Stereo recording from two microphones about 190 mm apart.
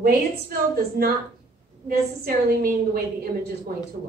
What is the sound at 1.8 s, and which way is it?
A woman's voice, 50° right (ahead or behind).